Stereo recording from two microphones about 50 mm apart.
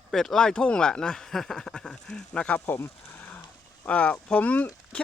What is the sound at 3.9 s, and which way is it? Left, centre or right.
Speech, left.